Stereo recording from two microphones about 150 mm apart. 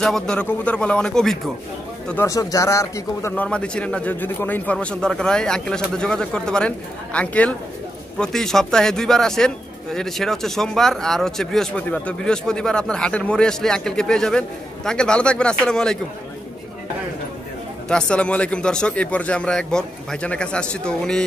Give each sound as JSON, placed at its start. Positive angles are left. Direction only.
{"t": 0.0, "sound": "a man's voice", "side_deg": 5}
{"t": 2.2, "sound": "a man's voice", "side_deg": 20}
{"t": 3.4, "sound": "a man's voice", "side_deg": 5}
{"t": 17.8, "sound": "a man's voice", "side_deg": 5}